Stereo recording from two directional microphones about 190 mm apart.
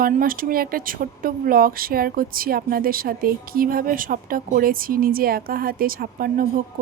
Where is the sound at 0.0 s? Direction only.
50° right (ahead or behind).